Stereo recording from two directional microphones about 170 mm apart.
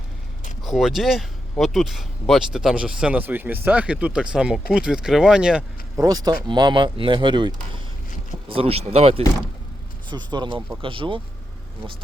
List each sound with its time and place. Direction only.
0.6 s speech: centre (ahead or behind)
6.0 s speech: 20° right (ahead or behind)